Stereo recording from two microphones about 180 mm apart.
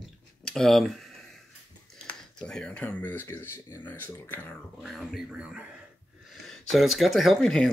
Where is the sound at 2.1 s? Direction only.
5° left (ahead or behind).